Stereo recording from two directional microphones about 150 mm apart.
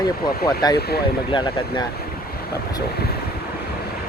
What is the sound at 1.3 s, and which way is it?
Speech, 35° left (ahead or behind).